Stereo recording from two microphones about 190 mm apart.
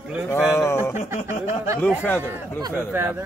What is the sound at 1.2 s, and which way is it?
Speech, 15° right (ahead or behind).